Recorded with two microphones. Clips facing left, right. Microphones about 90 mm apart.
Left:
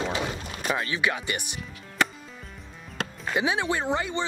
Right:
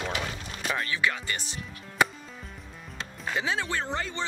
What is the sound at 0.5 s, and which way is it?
Boat, 5° left (ahead or behind).